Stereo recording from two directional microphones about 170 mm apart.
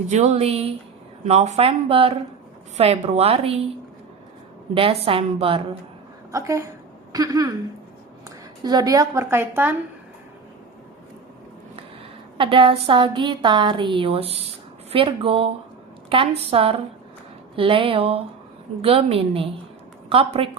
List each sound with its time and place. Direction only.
0.1 s speech: 40° right (ahead or behind)
4.7 s speech: 35° right (ahead or behind)
6.3 s a woman's voice: 20° right (ahead or behind)
8.6 s a woman's voice: 20° right (ahead or behind)
12.4 s a woman's voice: 30° right (ahead or behind)